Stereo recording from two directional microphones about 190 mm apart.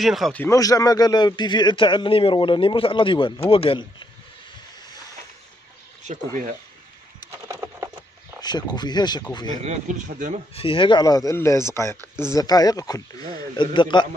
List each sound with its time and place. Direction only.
0.0 s speech: centre (ahead or behind)
0.4 s a man's voice: 15° left (ahead or behind)
7.2 s a sound: 15° right (ahead or behind)
8.4 s a man's voice: 20° left (ahead or behind)
9.6 s speech: 40° right (ahead or behind)
10.5 s a man's voice: 30° left (ahead or behind)